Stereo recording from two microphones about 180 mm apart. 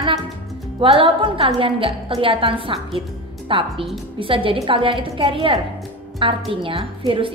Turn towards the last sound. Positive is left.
turn(degrees=-30)  # may be behind; listen again after turning